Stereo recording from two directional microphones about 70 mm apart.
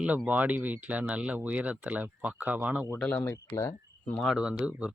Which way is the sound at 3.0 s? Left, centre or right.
Centre.